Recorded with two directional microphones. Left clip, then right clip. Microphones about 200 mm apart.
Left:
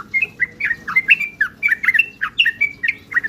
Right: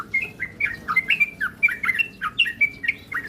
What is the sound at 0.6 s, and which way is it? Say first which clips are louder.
Bird: left 2 dB; 15° left (ahead or behind).